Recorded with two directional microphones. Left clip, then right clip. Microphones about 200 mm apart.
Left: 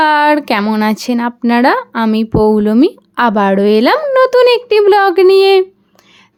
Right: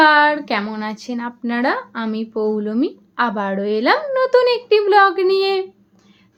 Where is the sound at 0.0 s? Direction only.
55° left (ahead or behind).